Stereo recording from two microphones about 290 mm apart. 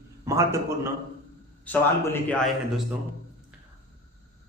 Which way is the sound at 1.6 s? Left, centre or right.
Centre.